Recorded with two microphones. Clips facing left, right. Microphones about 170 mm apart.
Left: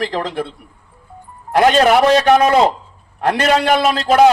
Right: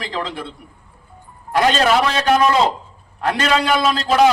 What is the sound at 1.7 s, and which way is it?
A man's voice, 45° left (ahead or behind).